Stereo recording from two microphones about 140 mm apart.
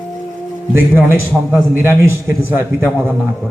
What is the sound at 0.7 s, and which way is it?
A man's voice, 15° right (ahead or behind).